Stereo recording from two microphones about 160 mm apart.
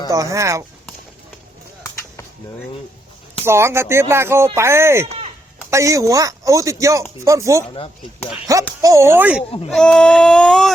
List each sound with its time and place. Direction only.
0.1 s speech: 20° right (ahead or behind)
3.4 s speech: 15° right (ahead or behind)
8.8 s speech: 20° right (ahead or behind)
9.6 s speech: centre (ahead or behind)